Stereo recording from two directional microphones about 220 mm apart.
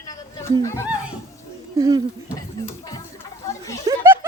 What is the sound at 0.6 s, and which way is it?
Speech, 10° left (ahead or behind).